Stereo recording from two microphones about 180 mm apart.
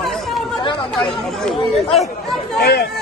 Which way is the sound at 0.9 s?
Centre (ahead or behind).